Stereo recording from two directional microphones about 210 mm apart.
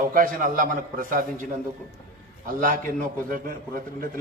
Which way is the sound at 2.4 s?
40° right (ahead or behind).